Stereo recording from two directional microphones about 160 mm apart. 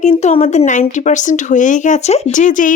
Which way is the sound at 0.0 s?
45° left (ahead or behind).